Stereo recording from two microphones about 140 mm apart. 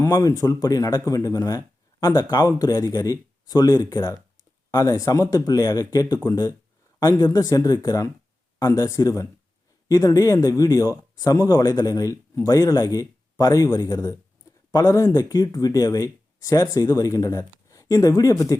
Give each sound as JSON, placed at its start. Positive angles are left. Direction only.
{"t": 0.0, "sound": "speech", "side_deg": 25}